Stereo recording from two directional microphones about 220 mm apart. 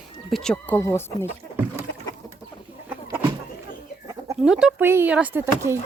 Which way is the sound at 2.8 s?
10° right (ahead or behind).